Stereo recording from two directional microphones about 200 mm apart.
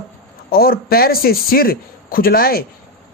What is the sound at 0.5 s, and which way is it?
A man's voice, 50° left (ahead or behind).